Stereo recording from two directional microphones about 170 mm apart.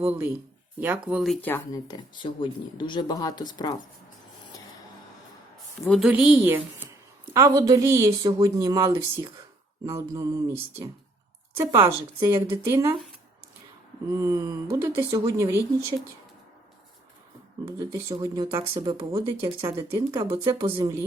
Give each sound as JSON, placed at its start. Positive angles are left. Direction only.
{"t": 0.0, "sound": "speech", "side_deg": -10}
{"t": 1.4, "sound": "speech", "side_deg": 15}
{"t": 5.8, "sound": "a woman's voice", "side_deg": 0}
{"t": 14.1, "sound": "speech", "side_deg": -20}
{"t": 17.7, "sound": "a woman's voice", "side_deg": -20}